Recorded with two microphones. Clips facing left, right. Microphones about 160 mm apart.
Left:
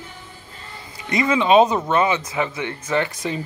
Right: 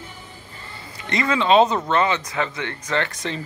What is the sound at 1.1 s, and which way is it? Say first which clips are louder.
Speech: left 2 dB; 20° left (ahead or behind).